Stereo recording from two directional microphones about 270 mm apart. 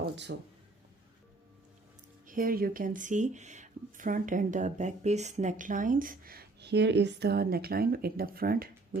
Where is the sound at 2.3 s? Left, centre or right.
Right.